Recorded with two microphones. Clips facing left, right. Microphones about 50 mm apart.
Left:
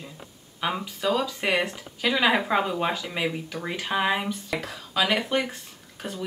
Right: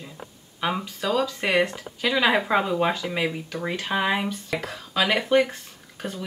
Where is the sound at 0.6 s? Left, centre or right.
Centre.